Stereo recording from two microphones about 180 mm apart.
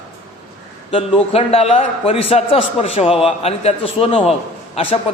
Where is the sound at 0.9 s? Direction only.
30° left (ahead or behind).